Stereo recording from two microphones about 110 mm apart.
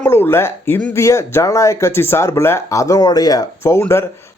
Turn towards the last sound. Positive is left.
turn(degrees=25)  # may be behind; listen again after turning